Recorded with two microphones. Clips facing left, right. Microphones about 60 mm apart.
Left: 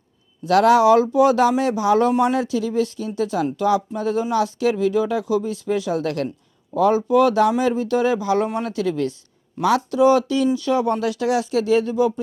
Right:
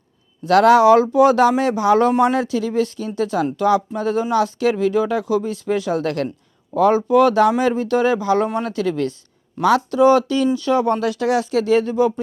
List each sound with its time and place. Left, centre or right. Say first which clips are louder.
0.4 s speech: right 2 dB; right